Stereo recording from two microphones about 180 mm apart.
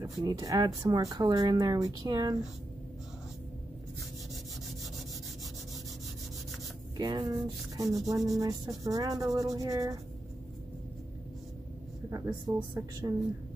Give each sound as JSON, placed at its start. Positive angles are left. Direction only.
{"t": 0.0, "sound": "speech", "side_deg": -20}
{"t": 7.0, "sound": "speech", "side_deg": -20}
{"t": 12.1, "sound": "speech", "side_deg": -20}